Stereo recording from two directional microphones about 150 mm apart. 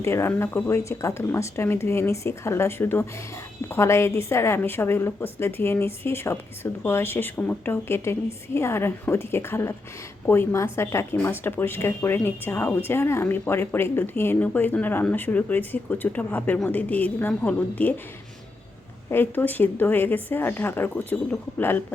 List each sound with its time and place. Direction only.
0.0 s speech: 15° left (ahead or behind)
19.1 s speech: 15° left (ahead or behind)